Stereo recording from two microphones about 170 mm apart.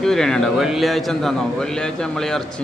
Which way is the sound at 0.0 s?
5° left (ahead or behind).